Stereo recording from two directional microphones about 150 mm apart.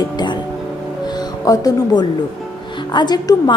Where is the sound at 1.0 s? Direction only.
25° left (ahead or behind).